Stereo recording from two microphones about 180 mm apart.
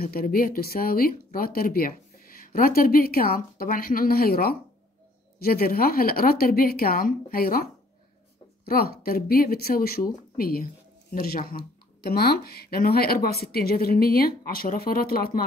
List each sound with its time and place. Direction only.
0.0 s speech: 55° left (ahead or behind)
8.6 s speech: 55° left (ahead or behind)